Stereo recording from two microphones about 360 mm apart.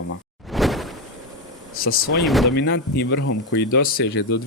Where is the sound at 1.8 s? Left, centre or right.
Left.